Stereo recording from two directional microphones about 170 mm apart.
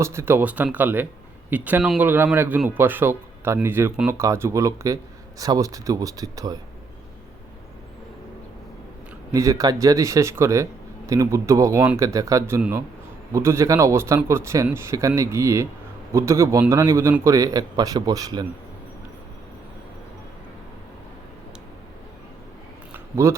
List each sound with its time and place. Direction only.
0.0 s a man's voice: 15° right (ahead or behind)
9.3 s a man's voice: 20° right (ahead or behind)
22.9 s a sound: 15° right (ahead or behind)